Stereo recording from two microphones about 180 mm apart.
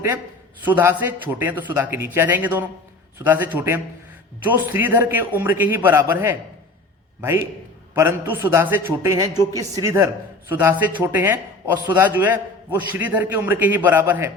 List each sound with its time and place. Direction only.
0.6 s a man's voice: 10° right (ahead or behind)